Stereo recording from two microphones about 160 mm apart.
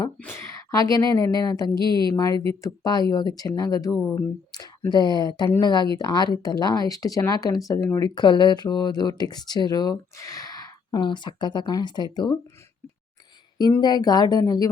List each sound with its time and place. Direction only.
0.2 s speech: 15° left (ahead or behind)
1.8 s speech: 30° right (ahead or behind)
2.6 s speech: 20° left (ahead or behind)
8.0 s speech: 25° left (ahead or behind)
13.8 s speech: 25° left (ahead or behind)